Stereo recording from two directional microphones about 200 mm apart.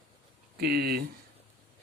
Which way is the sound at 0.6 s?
50° right (ahead or behind).